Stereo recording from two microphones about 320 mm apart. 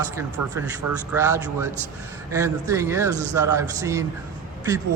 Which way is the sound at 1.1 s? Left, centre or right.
Centre.